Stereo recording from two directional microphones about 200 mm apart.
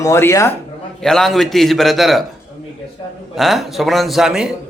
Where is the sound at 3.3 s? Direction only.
Centre (ahead or behind).